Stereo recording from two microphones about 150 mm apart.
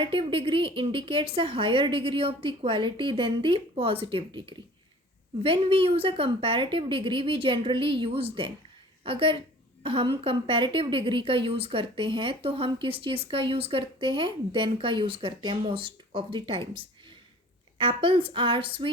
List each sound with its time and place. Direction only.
0.0 s a woman's voice: 35° right (ahead or behind)